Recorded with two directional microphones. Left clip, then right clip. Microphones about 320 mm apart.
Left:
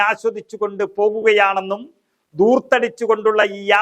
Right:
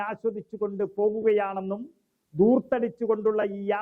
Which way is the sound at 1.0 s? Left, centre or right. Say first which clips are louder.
Left 8 dB; left.